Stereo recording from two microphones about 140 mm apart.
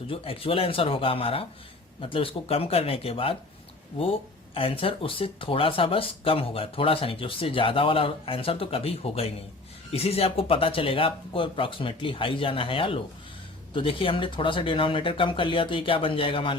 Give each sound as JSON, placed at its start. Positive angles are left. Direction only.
{"t": 0.1, "sound": "speech", "side_deg": 40}